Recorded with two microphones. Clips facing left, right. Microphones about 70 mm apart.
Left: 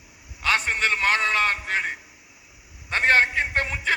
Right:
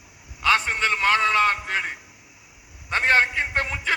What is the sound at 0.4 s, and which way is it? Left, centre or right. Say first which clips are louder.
A man's voice: right 2 dB; right.